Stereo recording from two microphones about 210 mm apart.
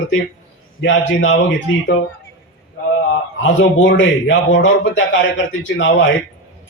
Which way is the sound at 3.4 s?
60° left (ahead or behind).